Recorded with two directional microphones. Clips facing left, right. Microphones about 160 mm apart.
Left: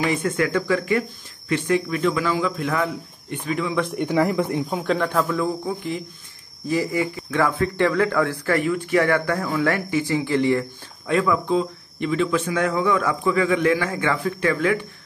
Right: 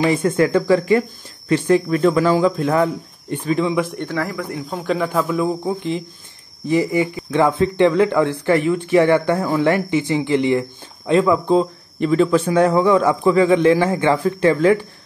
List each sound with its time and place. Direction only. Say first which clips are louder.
0.0 s speech: right 6 dB; 30° right (ahead or behind)
3.7 s speech: right 3 dB; 5° right (ahead or behind)
4.0 s speech: left 4 dB; 15° left (ahead or behind)
4.8 s a man's voice: right 4 dB; 5° right (ahead or behind); by 14.9 s 30° right (ahead or behind)